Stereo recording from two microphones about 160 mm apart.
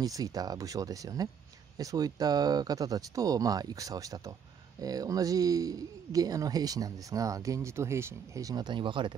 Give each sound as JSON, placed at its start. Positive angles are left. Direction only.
{"t": 0.0, "sound": "speech", "side_deg": -25}